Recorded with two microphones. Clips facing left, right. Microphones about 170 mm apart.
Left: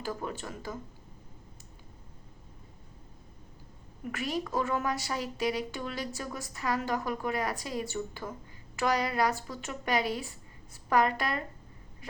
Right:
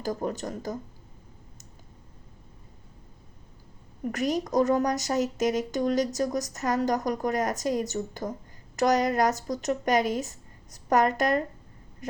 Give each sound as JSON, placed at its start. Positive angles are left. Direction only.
{"t": 0.0, "sound": "a woman's voice", "side_deg": -40}
{"t": 4.0, "sound": "a woman's voice", "side_deg": -40}